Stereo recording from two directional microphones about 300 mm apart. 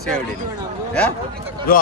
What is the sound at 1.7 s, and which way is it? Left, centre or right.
Speech, left.